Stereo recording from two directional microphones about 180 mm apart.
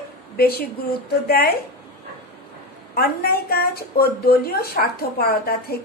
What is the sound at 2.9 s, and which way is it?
Speech, 60° left (ahead or behind).